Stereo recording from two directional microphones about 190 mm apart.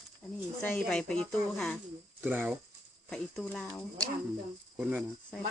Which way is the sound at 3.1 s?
5° left (ahead or behind).